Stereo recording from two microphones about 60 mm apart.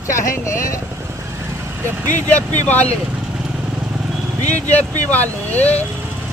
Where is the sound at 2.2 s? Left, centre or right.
Left.